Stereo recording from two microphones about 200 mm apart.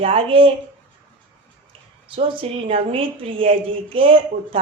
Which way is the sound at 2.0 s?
25° right (ahead or behind).